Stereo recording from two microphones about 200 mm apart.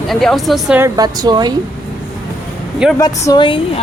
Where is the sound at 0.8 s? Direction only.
20° right (ahead or behind).